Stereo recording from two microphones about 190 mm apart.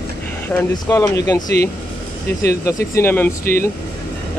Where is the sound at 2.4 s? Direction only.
15° left (ahead or behind).